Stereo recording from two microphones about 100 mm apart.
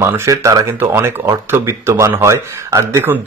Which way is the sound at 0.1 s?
30° right (ahead or behind).